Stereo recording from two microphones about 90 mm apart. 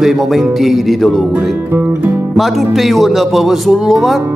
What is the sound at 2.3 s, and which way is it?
Speech, centre (ahead or behind).